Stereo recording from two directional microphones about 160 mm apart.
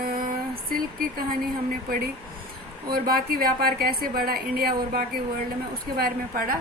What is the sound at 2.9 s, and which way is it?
A woman's voice, 65° right (ahead or behind).